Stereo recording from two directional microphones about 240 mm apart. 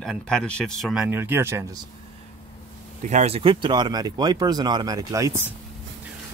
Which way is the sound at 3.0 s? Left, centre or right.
Right.